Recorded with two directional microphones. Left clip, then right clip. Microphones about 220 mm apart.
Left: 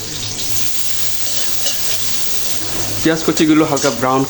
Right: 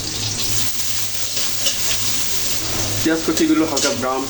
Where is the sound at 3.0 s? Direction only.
45° left (ahead or behind).